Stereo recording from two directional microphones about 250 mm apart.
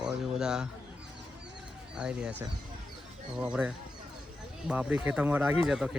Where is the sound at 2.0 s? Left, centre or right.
Centre.